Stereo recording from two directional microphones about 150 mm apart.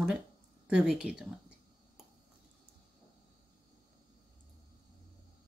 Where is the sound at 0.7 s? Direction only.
5° right (ahead or behind).